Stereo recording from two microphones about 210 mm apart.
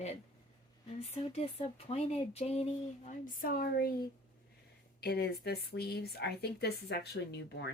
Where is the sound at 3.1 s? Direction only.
40° left (ahead or behind).